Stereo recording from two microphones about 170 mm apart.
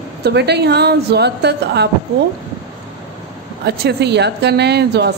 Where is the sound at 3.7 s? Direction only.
80° right.